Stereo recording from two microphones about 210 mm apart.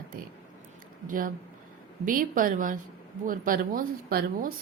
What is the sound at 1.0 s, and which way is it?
A woman's voice, 40° right (ahead or behind).